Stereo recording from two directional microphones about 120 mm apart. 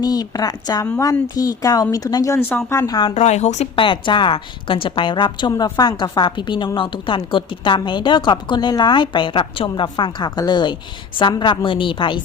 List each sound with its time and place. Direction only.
0.0 s a woman's voice: 35° left (ahead or behind)
3.2 s a woman's voice: 70° left (ahead or behind)
3.8 s a woman's voice: 45° left (ahead or behind)